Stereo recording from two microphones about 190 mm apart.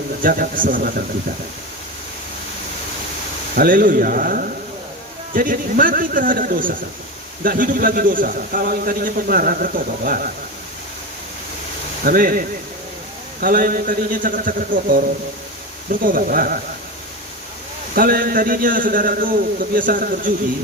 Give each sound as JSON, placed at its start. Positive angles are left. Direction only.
{"t": 0.2, "sound": "a man's voice", "side_deg": -45}
{"t": 3.5, "sound": "a man's voice", "side_deg": -50}
{"t": 12.0, "sound": "a man's voice", "side_deg": -50}
{"t": 17.9, "sound": "a man's voice", "side_deg": -50}